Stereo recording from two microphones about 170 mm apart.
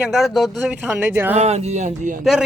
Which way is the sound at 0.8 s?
10° right (ahead or behind).